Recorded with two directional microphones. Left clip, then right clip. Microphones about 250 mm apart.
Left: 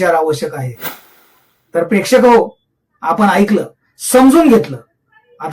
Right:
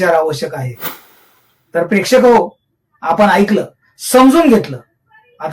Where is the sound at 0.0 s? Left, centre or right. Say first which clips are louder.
Even; centre.